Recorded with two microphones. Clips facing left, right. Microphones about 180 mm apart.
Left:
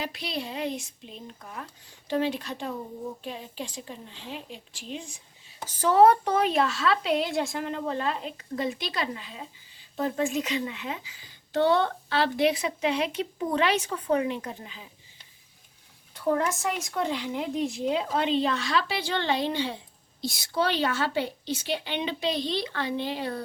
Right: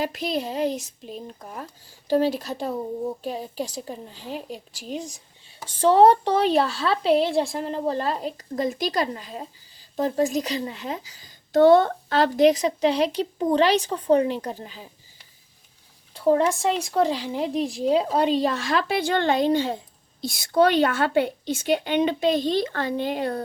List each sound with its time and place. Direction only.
0.0 s a woman's voice: 45° right (ahead or behind)
16.1 s a woman's voice: 30° right (ahead or behind); by 23.4 s 50° right (ahead or behind)